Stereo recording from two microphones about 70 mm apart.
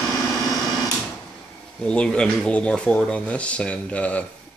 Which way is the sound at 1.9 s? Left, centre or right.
Centre.